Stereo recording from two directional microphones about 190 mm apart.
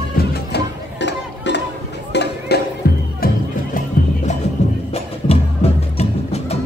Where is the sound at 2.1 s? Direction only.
60° left (ahead or behind).